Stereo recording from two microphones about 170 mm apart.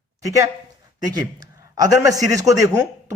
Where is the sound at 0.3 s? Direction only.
20° right (ahead or behind).